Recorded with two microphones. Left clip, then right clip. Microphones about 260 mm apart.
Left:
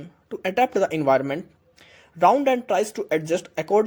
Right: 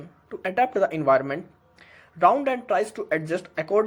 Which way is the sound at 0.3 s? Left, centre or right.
Left.